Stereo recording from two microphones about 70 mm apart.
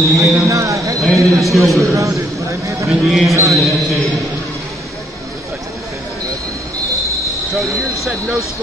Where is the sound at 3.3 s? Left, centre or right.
Right.